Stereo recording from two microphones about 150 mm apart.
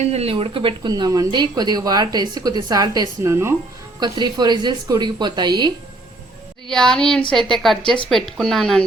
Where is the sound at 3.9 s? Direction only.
30° right (ahead or behind).